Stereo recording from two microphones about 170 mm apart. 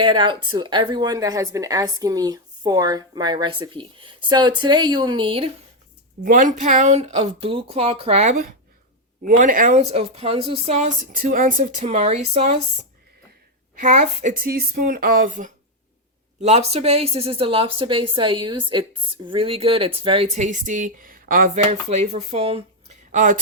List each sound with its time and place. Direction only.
0.0 s a woman's voice: 30° right (ahead or behind)
6.2 s a woman's voice: 50° right (ahead or behind); by 12.8 s 35° right (ahead or behind)
13.7 s a woman's voice: 50° right (ahead or behind)
21.5 s a woman's voice: 40° right (ahead or behind)
23.1 s speech: 50° right (ahead or behind)